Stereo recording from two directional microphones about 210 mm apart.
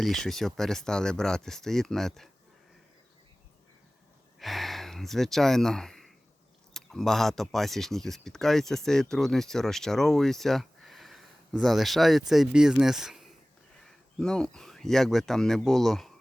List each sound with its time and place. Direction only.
0.0 s speech: centre (ahead or behind)
4.4 s a sound: centre (ahead or behind)
6.7 s speech: centre (ahead or behind)